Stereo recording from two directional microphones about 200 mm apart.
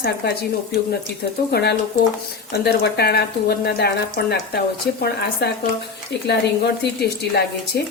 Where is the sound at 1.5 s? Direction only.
55° left (ahead or behind).